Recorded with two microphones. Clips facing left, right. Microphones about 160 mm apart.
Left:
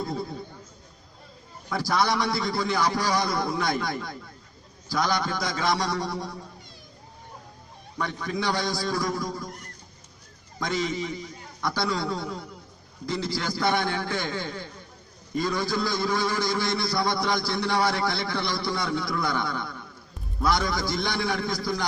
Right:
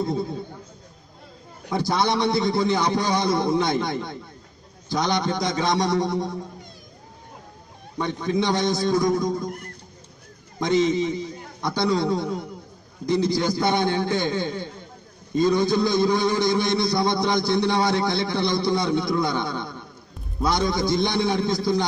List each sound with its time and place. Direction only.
0.0 s a man's voice: 20° right (ahead or behind)
1.7 s a man's voice: 20° right (ahead or behind)
8.0 s a man's voice: 20° right (ahead or behind)
10.6 s a man's voice: 20° right (ahead or behind)